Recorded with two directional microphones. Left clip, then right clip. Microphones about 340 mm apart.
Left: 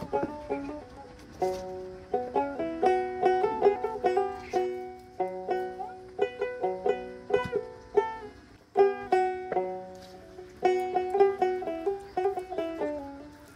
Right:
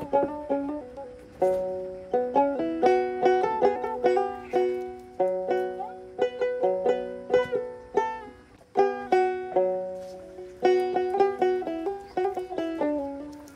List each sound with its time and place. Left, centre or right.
0.1 s music: right
2.0 s music: right